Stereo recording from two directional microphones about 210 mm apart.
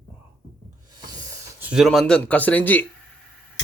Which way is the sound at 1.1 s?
15° right (ahead or behind).